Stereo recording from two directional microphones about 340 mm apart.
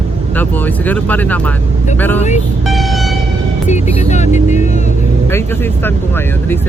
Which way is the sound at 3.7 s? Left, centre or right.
Left.